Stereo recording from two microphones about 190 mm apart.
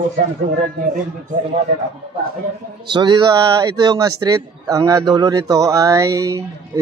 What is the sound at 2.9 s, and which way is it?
A man's voice, 25° right (ahead or behind).